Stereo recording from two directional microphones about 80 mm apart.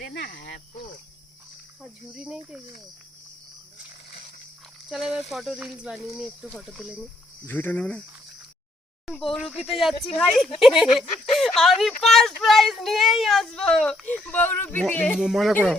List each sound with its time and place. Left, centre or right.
1.8 s speech: centre
4.9 s a woman's voice: centre
7.4 s speech: left
9.2 s a woman's voice: centre; by 15.2 s left
15.2 s a woman's voice: centre